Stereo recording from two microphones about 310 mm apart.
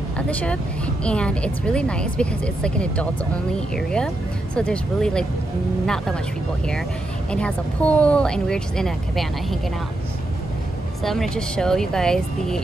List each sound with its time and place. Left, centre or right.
0.3 s speech: centre
7.2 s speech: centre
11.0 s speech: centre